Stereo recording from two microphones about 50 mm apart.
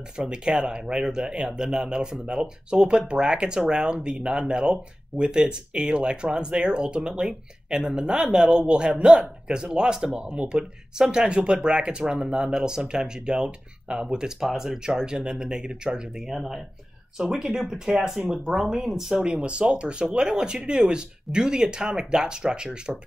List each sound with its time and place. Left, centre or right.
0.2 s speech: centre
17.2 s speech: centre
19.2 s speech: right